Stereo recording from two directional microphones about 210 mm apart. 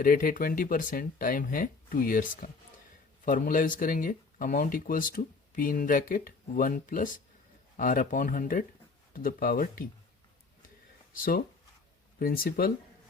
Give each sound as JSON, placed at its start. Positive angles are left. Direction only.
{"t": 0.0, "sound": "speech", "side_deg": 40}
{"t": 11.1, "sound": "speech", "side_deg": 40}